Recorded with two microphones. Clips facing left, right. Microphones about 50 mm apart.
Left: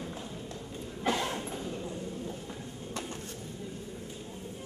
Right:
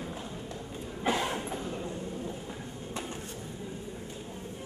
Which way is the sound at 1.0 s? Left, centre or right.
Centre.